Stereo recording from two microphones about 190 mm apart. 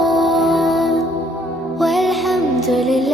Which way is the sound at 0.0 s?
Centre (ahead or behind).